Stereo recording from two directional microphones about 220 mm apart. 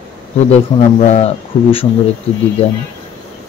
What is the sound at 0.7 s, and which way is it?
Speech, 30° left (ahead or behind).